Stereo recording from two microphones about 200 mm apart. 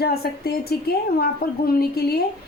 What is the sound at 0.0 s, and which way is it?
A woman's voice, 50° left (ahead or behind).